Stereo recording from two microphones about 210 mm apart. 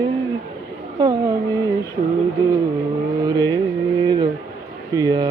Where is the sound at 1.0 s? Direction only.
20° right (ahead or behind).